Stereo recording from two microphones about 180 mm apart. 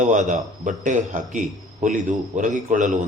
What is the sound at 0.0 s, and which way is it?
Speech, 40° right (ahead or behind).